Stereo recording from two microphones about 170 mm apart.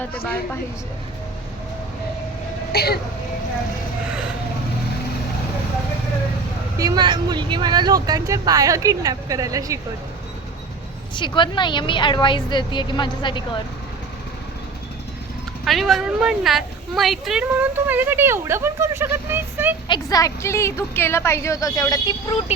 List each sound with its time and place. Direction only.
2.7 s speech: 70° left (ahead or behind)
6.7 s speech: 20° right (ahead or behind)
11.1 s a woman's voice: 30° left (ahead or behind)
15.6 s speech: centre (ahead or behind)
19.9 s a woman's voice: 20° left (ahead or behind)